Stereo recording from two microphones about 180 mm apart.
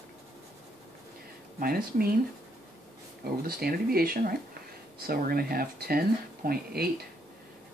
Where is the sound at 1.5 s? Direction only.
55° right (ahead or behind).